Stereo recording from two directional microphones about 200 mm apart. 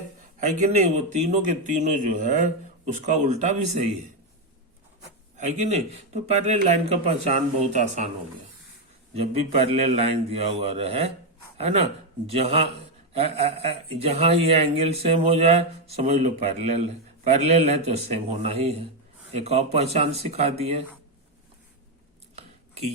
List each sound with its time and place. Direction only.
0.3 s speech: 35° right (ahead or behind)
5.4 s speech: 35° right (ahead or behind)
9.1 s speech: 30° right (ahead or behind)